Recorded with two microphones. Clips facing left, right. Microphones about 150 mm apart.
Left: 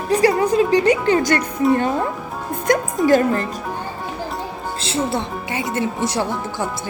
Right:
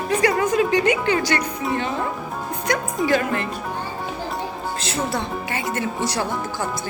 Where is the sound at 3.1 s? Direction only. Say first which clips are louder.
Left 6 dB; 40° left (ahead or behind).